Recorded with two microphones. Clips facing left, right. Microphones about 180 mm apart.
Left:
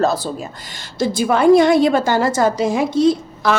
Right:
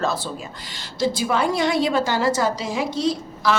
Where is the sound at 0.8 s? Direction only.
50° left (ahead or behind).